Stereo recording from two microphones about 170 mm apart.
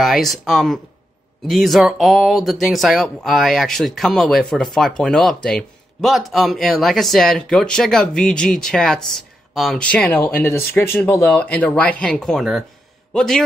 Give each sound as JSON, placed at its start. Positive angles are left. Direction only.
{"t": 0.0, "sound": "a man's voice", "side_deg": 0}